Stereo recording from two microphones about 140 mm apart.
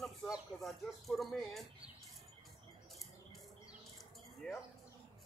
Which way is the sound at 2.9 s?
Centre (ahead or behind).